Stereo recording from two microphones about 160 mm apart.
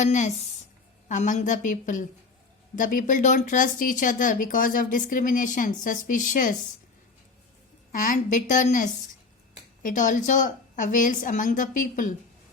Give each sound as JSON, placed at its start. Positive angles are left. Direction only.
{"t": 0.0, "sound": "a woman's voice", "side_deg": 50}
{"t": 7.9, "sound": "a woman's voice", "side_deg": 55}